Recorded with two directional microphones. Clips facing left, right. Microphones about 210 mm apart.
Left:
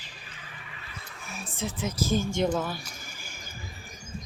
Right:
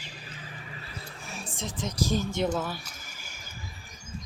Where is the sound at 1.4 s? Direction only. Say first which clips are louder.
Left 3 dB; 5° left (ahead or behind).